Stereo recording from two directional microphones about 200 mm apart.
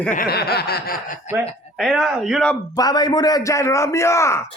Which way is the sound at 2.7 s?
20° left (ahead or behind).